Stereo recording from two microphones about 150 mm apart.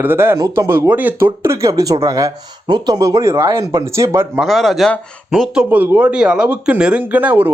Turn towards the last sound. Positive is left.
turn(degrees=-10)  # may be behind; listen again after turning